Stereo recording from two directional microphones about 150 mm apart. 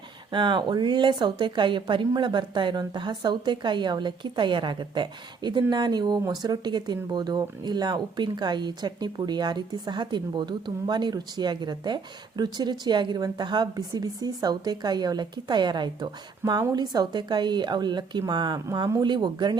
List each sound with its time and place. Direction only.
0.3 s a woman's voice: 30° right (ahead or behind)